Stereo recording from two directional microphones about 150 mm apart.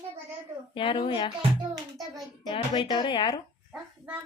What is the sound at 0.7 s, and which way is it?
Speech, 35° left (ahead or behind).